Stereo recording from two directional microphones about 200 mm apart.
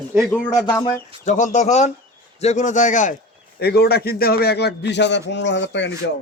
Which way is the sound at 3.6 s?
55° left (ahead or behind).